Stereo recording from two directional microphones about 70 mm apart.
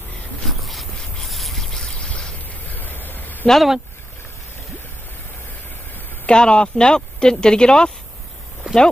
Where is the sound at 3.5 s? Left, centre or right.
Centre.